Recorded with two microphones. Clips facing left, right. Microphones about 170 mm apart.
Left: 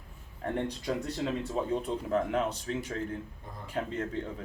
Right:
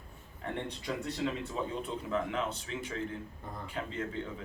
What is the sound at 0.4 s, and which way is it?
A man's voice, 45° left (ahead or behind).